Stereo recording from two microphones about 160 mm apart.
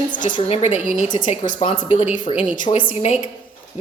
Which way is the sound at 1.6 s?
35° left (ahead or behind).